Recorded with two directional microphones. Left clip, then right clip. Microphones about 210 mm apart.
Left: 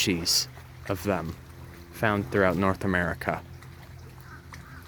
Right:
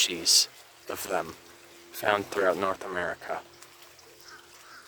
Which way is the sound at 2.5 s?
5° right (ahead or behind).